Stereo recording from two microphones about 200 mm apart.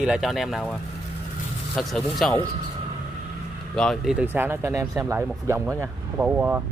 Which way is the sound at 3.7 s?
5° left (ahead or behind).